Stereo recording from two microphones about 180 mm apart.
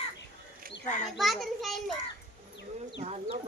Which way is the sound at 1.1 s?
Centre (ahead or behind).